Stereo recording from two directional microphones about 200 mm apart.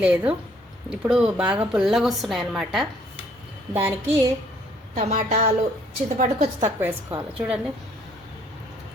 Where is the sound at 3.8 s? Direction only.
15° right (ahead or behind).